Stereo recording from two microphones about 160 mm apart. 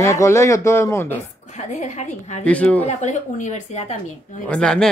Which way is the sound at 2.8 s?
45° left (ahead or behind).